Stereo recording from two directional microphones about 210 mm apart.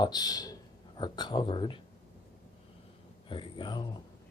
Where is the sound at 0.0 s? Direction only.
20° left (ahead or behind).